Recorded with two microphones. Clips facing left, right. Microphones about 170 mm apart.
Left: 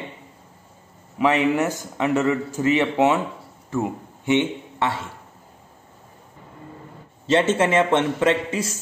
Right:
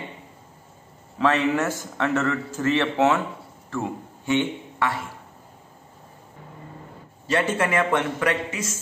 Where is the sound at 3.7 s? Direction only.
20° left (ahead or behind).